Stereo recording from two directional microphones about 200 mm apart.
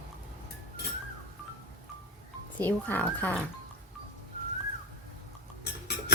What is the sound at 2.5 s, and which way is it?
Speech, 10° left (ahead or behind).